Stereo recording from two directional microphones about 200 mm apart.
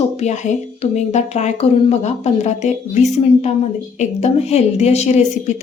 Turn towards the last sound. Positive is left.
turn(degrees=35)  # may be behind; listen again after turning